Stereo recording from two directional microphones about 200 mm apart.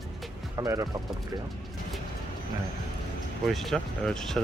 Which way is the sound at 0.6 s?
15° right (ahead or behind).